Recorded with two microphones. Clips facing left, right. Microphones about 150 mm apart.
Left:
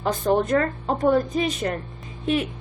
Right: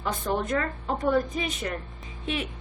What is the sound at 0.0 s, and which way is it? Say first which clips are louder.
A woman's voice: left 7 dB; 35° left (ahead or behind).